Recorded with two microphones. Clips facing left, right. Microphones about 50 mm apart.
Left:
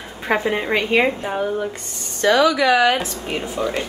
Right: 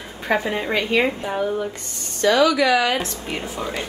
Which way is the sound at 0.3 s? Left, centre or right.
Centre.